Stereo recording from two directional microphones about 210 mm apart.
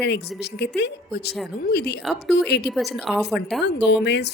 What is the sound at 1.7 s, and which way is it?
Speech, 50° left (ahead or behind).